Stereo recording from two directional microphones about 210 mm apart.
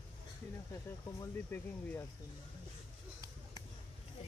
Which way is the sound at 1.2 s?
10° left (ahead or behind).